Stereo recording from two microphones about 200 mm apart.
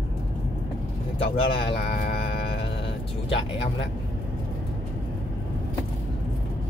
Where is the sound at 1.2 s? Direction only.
25° left (ahead or behind).